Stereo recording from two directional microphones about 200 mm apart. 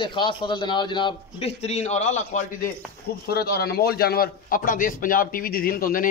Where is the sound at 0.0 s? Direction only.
25° left (ahead or behind).